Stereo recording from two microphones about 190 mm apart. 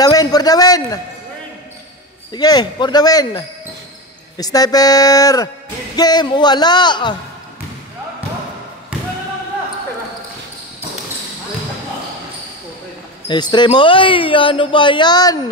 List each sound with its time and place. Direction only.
0.0 s a man's voice: 20° left (ahead or behind)
2.3 s speech: 20° left (ahead or behind)
13.3 s speech: 25° left (ahead or behind)